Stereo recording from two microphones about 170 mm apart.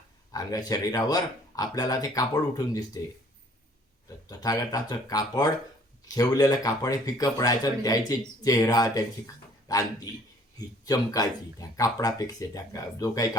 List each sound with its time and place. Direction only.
0.3 s speech: 20° left (ahead or behind)
4.3 s speech: 20° left (ahead or behind)